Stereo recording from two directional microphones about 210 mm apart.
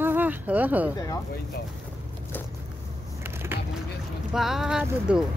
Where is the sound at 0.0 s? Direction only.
10° right (ahead or behind).